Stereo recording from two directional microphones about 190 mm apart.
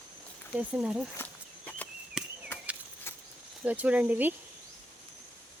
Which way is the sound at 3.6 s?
5° right (ahead or behind).